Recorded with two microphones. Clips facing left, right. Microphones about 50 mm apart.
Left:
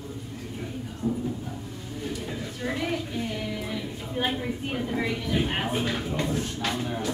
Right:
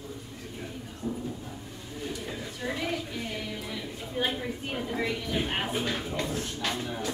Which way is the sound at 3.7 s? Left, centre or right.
Centre.